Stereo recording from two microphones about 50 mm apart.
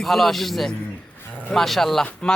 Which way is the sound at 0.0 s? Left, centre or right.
Centre.